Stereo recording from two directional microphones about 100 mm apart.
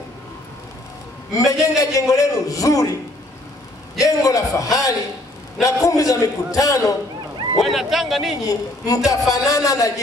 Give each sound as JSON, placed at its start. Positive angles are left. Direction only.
{"t": 1.3, "sound": "a man's voice", "side_deg": 35}
{"t": 4.0, "sound": "a man's voice", "side_deg": 35}
{"t": 7.6, "sound": "speech", "side_deg": 0}
{"t": 8.5, "sound": "a man's voice", "side_deg": 35}